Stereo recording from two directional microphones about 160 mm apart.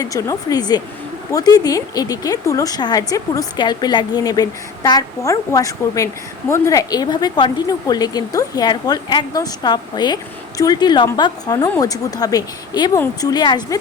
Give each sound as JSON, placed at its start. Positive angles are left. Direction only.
{"t": 0.0, "sound": "speech", "side_deg": 20}